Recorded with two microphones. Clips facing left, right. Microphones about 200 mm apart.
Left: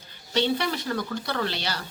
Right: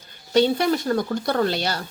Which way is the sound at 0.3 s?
45° right (ahead or behind).